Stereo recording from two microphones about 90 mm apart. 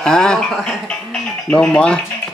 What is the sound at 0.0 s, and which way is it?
Speech, 5° left (ahead or behind).